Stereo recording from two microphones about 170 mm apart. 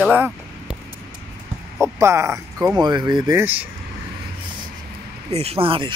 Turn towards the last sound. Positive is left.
turn(degrees=-30)  # may be behind; listen again after turning